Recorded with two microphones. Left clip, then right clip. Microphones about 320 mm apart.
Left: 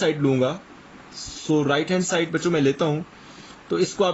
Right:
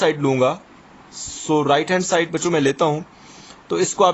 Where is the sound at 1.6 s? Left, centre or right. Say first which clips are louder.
Right 5 dB; centre.